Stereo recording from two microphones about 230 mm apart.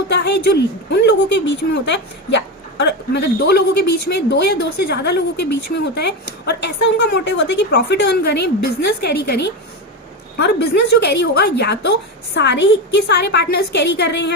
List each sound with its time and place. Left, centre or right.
0.1 s speech: left